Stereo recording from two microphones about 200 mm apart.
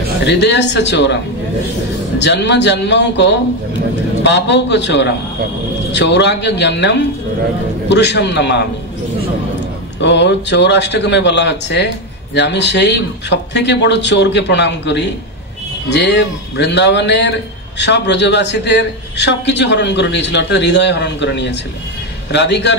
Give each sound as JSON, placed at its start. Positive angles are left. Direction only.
{"t": 0.3, "sound": "a man's voice", "side_deg": 60}
{"t": 9.9, "sound": "a man's voice", "side_deg": 60}